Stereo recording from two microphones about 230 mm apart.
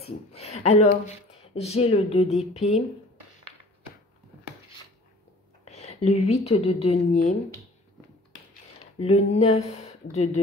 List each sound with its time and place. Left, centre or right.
0.0 s speech: left
5.7 s speech: left
9.0 s speech: left